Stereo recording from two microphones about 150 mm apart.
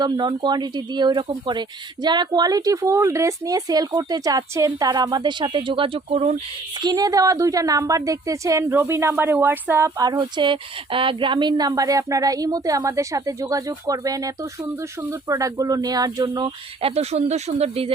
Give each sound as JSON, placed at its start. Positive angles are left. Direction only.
{"t": 0.0, "sound": "a woman's voice", "side_deg": -30}
{"t": 6.7, "sound": "a woman's voice", "side_deg": -25}
{"t": 16.8, "sound": "speech", "side_deg": -45}